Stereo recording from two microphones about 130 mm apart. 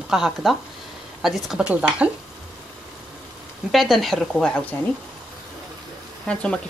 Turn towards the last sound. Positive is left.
turn(degrees=10)  # may be behind; listen again after turning